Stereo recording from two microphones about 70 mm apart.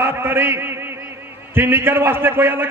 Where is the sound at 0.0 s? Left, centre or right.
Right.